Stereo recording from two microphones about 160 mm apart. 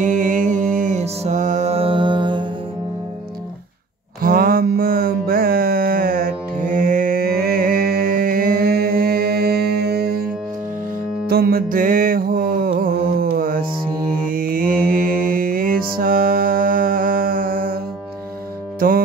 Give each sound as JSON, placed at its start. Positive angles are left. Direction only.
{"t": 0.0, "sound": "music", "side_deg": -55}
{"t": 4.2, "sound": "mantra", "side_deg": -65}
{"t": 11.2, "sound": "music", "side_deg": -75}
{"t": 14.2, "sound": "mantra", "side_deg": -60}
{"t": 18.8, "sound": "music", "side_deg": -65}